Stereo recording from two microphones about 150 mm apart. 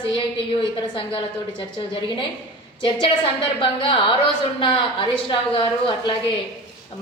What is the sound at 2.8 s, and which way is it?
A woman's voice, 35° left (ahead or behind).